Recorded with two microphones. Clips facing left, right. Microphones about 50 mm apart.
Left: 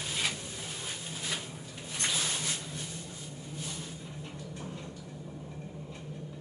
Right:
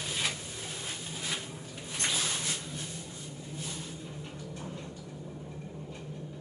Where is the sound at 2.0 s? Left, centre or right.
Centre.